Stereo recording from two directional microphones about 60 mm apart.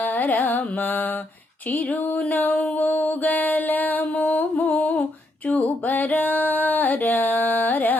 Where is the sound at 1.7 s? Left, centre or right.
Left.